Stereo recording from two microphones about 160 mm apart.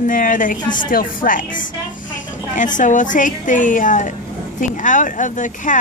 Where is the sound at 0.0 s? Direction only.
55° left (ahead or behind).